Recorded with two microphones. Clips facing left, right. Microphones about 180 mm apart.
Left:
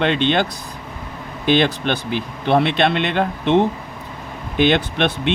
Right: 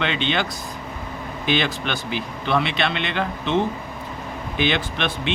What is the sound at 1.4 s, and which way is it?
Speech, 50° left (ahead or behind).